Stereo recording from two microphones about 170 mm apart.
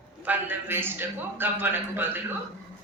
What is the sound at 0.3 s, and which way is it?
A woman's voice, 10° right (ahead or behind).